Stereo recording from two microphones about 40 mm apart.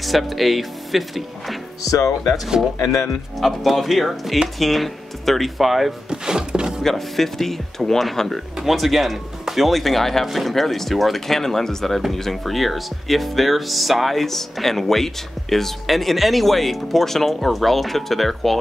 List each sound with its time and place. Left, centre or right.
0.0 s speech: centre
3.3 s speech: centre
6.0 s drawer open or close: centre
6.8 s speech: centre